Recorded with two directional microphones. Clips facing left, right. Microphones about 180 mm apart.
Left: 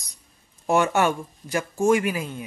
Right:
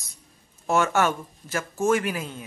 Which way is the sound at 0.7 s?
15° left (ahead or behind).